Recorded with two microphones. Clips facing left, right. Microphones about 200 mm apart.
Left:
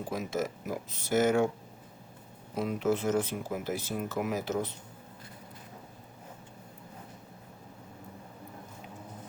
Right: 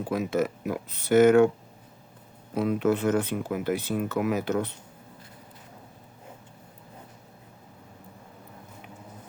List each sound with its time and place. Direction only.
0.1 s speech: 65° right (ahead or behind)
2.6 s speech: 60° right (ahead or behind)